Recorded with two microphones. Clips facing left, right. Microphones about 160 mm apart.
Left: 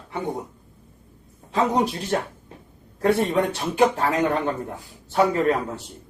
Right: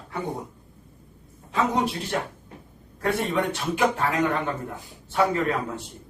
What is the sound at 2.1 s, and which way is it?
Speech, 35° left (ahead or behind).